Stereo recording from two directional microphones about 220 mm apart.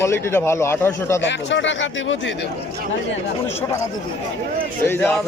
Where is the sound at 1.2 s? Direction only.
55° left (ahead or behind).